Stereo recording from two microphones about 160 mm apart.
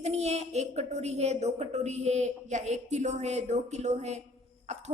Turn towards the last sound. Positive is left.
turn(degrees=-45)  # may be behind; listen again after turning